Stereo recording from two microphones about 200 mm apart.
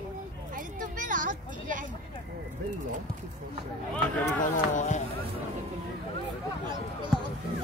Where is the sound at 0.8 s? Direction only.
40° right (ahead or behind).